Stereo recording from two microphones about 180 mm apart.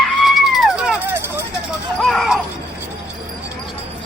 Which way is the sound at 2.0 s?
Centre (ahead or behind).